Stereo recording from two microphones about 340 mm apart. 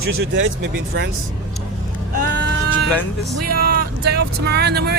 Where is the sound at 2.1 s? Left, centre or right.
Right.